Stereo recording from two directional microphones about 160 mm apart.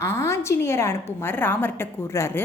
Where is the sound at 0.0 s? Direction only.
15° left (ahead or behind).